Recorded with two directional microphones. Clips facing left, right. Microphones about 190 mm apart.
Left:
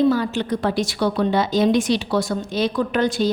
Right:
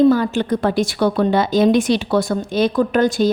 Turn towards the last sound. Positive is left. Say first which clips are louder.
# right 4 dB
turn(degrees=-50)  # may be behind; listen again after turning